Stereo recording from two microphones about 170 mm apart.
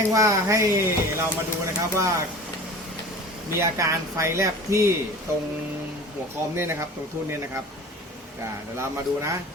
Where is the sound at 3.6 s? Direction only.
15° right (ahead or behind).